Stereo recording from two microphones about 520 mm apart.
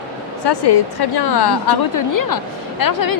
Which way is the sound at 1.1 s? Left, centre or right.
Left.